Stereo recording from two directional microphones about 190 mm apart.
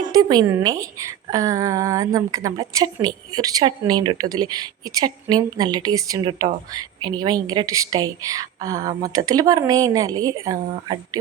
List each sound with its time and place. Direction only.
0.0 s a woman's voice: 20° right (ahead or behind)